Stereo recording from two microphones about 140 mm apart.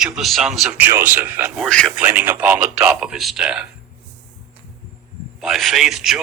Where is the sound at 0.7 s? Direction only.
15° right (ahead or behind).